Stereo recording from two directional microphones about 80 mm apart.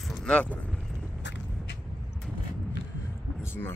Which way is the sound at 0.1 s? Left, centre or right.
Centre.